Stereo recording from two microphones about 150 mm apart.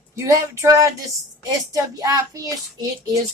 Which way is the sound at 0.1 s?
20° right (ahead or behind).